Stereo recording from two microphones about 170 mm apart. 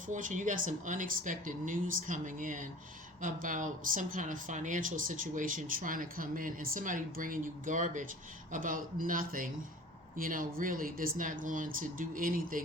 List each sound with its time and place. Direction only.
0.1 s speech: 50° right (ahead or behind)